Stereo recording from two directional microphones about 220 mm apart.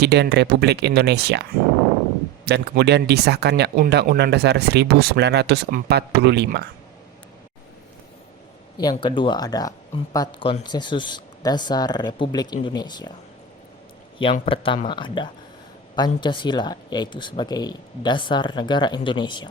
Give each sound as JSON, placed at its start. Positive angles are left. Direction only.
{"t": 0.0, "sound": "speech", "side_deg": -50}
{"t": 8.8, "sound": "speech", "side_deg": 20}
{"t": 14.4, "sound": "speech", "side_deg": 25}